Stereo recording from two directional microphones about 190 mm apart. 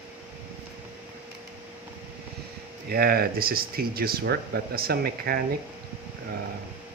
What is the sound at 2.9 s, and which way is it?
Speech, 55° right (ahead or behind).